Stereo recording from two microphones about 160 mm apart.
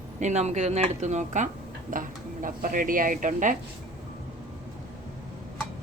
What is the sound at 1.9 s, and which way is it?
Speech, 60° right (ahead or behind).